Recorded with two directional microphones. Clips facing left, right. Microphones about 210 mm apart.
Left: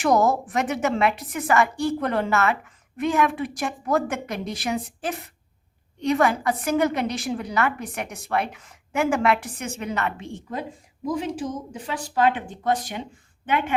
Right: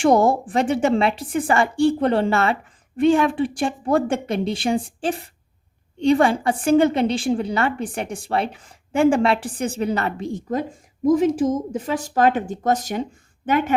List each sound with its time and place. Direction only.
0.0 s a woman's voice: 30° right (ahead or behind)